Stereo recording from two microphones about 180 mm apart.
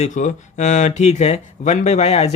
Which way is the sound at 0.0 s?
40° left (ahead or behind).